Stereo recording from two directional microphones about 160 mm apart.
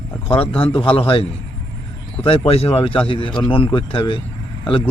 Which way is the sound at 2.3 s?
35° left (ahead or behind).